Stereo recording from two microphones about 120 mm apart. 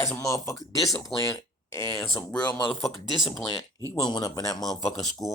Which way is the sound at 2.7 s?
Centre (ahead or behind).